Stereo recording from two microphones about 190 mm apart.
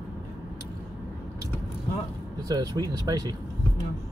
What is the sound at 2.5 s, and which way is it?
Speech, 20° right (ahead or behind).